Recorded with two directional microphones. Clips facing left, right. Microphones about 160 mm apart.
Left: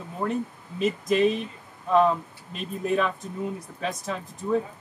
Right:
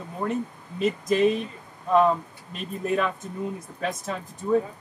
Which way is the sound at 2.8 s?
Centre (ahead or behind).